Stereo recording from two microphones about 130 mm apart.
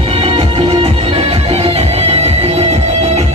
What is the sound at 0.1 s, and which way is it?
Music, 50° right (ahead or behind).